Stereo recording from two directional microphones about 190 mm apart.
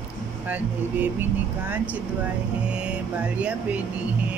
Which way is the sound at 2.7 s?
5° right (ahead or behind).